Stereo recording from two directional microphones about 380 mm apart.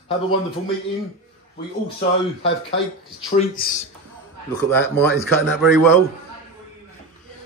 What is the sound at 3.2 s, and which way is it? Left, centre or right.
Speech, left.